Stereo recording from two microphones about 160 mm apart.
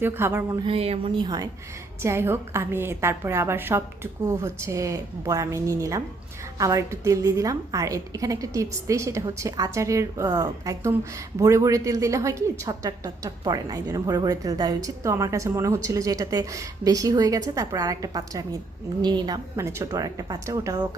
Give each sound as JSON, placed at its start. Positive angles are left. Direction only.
{"t": 0.0, "sound": "a woman's voice", "side_deg": -15}
{"t": 0.6, "sound": "a woman's voice", "side_deg": -35}
{"t": 2.0, "sound": "a woman's voice", "side_deg": -15}